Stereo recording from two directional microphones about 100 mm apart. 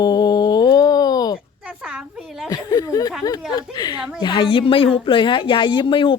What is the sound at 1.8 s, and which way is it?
Speech, 10° right (ahead or behind).